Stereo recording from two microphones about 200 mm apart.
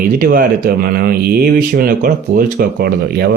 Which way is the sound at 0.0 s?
45° right (ahead or behind).